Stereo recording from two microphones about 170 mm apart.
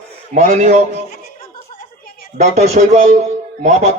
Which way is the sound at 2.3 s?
40° right (ahead or behind).